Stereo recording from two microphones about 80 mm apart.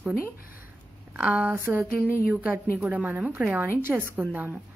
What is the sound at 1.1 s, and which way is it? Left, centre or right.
A woman's voice, centre.